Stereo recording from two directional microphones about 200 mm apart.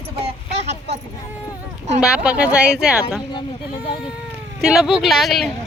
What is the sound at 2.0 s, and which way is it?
Speech, 5° right (ahead or behind).